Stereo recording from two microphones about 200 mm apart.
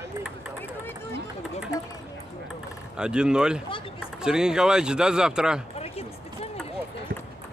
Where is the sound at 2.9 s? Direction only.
5° right (ahead or behind).